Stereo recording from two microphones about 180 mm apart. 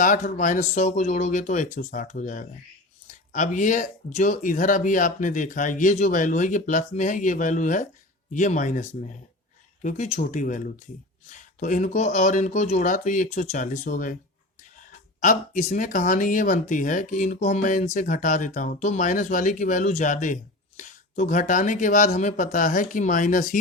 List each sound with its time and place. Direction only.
0.0 s speech: 45° left (ahead or behind)
15.2 s speech: 45° left (ahead or behind)